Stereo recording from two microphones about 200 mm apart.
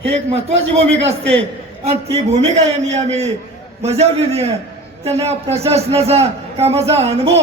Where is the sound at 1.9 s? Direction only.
30° right (ahead or behind).